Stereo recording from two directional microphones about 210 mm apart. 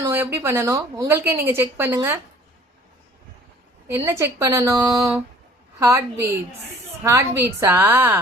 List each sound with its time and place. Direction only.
0.0 s a woman's voice: 10° right (ahead or behind)
3.8 s a woman's voice: 10° right (ahead or behind)